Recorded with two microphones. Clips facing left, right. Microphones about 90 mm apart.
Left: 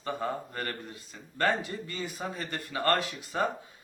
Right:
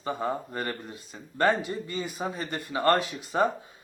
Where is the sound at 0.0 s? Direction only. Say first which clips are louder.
Right 3 dB; 15° right (ahead or behind).